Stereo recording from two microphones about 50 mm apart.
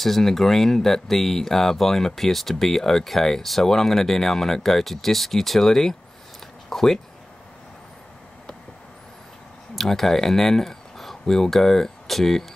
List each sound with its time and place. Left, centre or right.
0.0 s speech: centre
9.8 s speech: centre